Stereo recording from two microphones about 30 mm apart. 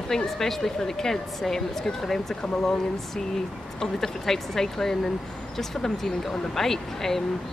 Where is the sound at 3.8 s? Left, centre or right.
Centre.